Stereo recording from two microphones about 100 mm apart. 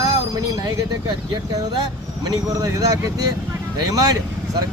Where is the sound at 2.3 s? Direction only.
35° right (ahead or behind).